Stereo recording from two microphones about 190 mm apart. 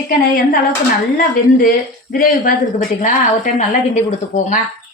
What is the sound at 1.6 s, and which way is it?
Speech, 45° left (ahead or behind).